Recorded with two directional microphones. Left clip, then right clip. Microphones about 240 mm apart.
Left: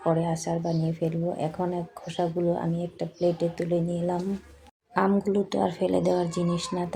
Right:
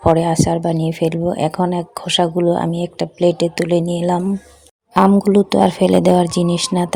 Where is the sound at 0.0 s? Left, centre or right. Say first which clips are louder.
Right 12 dB; right.